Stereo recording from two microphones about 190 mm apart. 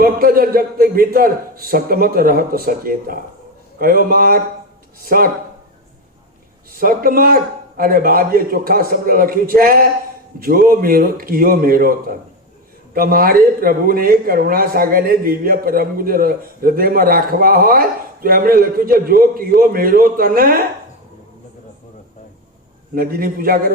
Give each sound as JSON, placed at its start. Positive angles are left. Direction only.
{"t": 0.0, "sound": "speech", "side_deg": -50}
{"t": 6.7, "sound": "speech", "side_deg": -50}
{"t": 23.0, "sound": "speech", "side_deg": -50}